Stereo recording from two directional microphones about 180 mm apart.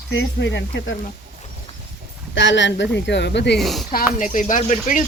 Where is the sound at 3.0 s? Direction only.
75° left (ahead or behind).